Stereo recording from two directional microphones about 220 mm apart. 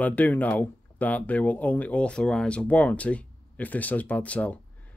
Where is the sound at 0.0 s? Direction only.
5° left (ahead or behind).